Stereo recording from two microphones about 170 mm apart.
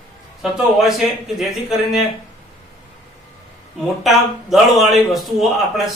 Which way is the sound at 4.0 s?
Centre (ahead or behind).